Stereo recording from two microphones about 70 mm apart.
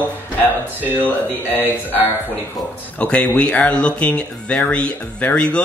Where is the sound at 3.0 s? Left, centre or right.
Centre.